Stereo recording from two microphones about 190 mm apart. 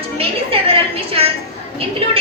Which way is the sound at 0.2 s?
30° right (ahead or behind).